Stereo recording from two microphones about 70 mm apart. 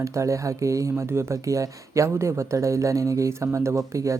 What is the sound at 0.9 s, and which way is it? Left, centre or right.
Speech, right.